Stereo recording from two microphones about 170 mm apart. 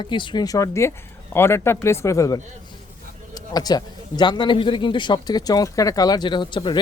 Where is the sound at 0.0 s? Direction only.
30° left (ahead or behind).